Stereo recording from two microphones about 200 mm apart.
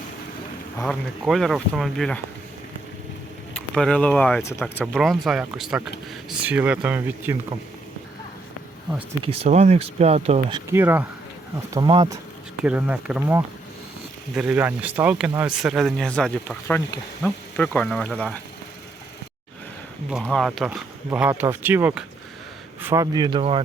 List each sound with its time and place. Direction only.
0.8 s speech: 5° left (ahead or behind)
3.5 s speech: 5° left (ahead or behind)
9.0 s speech: 30° right (ahead or behind)
10.7 s speech: 10° right (ahead or behind)
11.7 s speech: 20° right (ahead or behind)
12.6 s speech: 5° right (ahead or behind)
20.1 s speech: centre (ahead or behind); by 23.6 s 25° right (ahead or behind)